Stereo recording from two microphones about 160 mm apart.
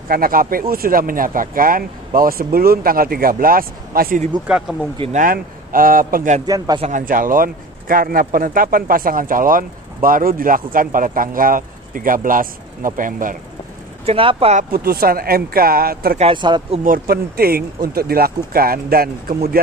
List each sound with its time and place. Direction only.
0.1 s speech: 65° right (ahead or behind)
4.5 s speech: 5° right (ahead or behind)
5.1 s speech: 60° right (ahead or behind)
6.4 s a man's voice: 25° right (ahead or behind)
6.9 s speech: 55° right (ahead or behind)
14.0 s speech: 35° right (ahead or behind)
14.6 s speech: 70° right (ahead or behind)
16.2 s speech: 30° right (ahead or behind)
16.8 s speech: 65° right (ahead or behind)